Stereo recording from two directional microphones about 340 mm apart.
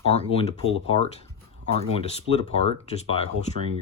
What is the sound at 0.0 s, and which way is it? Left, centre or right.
Speech, centre.